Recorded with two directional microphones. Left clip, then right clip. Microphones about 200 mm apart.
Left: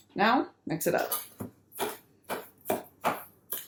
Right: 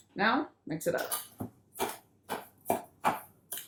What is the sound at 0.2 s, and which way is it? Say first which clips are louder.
Speech: left 4 dB; 25° left (ahead or behind).